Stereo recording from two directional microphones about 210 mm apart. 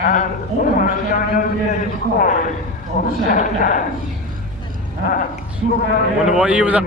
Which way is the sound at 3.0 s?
40° left (ahead or behind).